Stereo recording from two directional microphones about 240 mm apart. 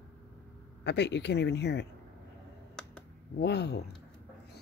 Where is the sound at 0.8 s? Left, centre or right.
Left.